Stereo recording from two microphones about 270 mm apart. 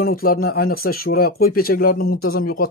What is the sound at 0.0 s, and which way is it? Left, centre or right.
A man's voice, left.